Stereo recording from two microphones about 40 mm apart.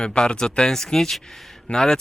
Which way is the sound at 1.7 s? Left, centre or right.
Left.